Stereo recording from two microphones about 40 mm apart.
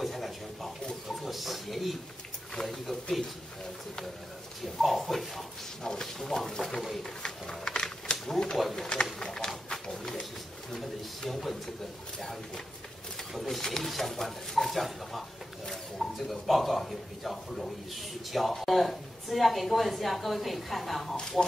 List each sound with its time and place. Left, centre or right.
0.0 s a sound: centre
1.0 s speech: centre
4.8 s speech: centre
5.9 s speech: centre
7.0 s a sound: centre
8.3 s speech: centre
8.5 s speech: centre
9.2 s a sound: centre
13.3 s speech: centre